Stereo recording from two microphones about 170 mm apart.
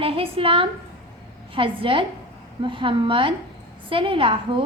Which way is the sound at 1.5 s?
30° right (ahead or behind).